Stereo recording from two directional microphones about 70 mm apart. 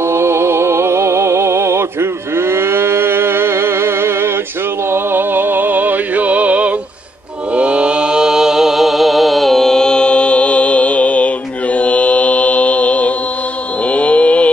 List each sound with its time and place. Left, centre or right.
0.0 s music: right; by 6.7 s centre
7.5 s mantra: centre